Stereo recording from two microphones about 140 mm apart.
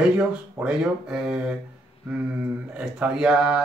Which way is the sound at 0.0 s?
5° right (ahead or behind).